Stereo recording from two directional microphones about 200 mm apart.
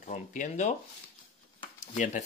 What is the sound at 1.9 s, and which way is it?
Speech, 35° left (ahead or behind).